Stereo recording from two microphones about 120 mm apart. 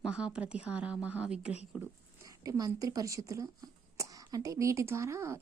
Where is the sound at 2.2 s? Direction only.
30° right (ahead or behind).